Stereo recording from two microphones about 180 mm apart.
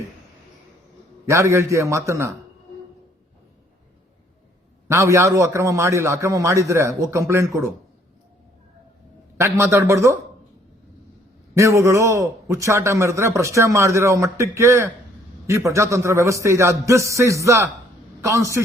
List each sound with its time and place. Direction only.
1.3 s a man's voice: 15° right (ahead or behind)
4.9 s a man's voice: 15° right (ahead or behind)
9.4 s a man's voice: 15° right (ahead or behind)
11.5 s a man's voice: 15° right (ahead or behind)